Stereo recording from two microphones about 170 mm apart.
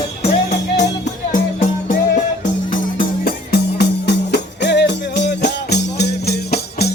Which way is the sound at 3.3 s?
75° left (ahead or behind).